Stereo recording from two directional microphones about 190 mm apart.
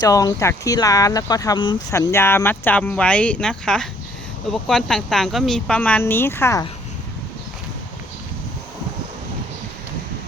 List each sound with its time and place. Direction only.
0.0 s speech: 20° left (ahead or behind)